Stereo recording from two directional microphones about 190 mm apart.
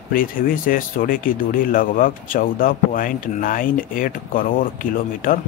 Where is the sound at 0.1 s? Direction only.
50° left (ahead or behind).